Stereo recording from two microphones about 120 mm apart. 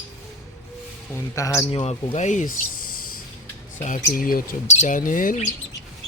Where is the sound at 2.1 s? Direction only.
85° left.